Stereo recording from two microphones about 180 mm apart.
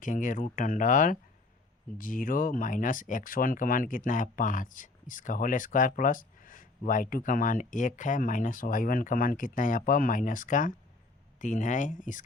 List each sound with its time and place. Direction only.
0.0 s speech: 45° left (ahead or behind)